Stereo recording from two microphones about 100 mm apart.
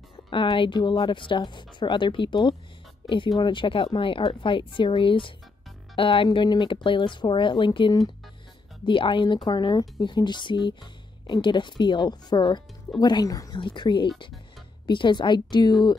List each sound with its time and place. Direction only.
0.3 s a woman's voice: 60° left (ahead or behind)
6.2 s speech: 45° left (ahead or behind)
13.6 s speech: 55° left (ahead or behind)